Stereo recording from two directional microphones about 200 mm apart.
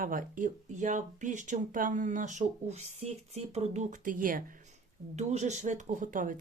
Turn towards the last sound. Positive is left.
turn(degrees=-40)  # may be behind; listen again after turning